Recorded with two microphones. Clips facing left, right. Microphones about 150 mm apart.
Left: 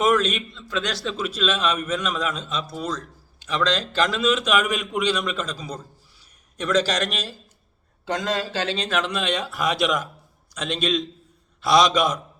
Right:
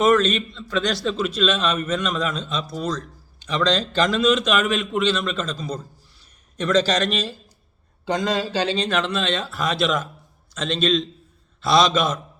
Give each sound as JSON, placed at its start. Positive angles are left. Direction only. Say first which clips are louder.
{"t": 0.0, "sound": "a man's voice", "louder": "right 3 dB", "side_deg": 10}